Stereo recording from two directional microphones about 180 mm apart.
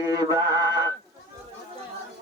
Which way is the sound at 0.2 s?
20° right (ahead or behind).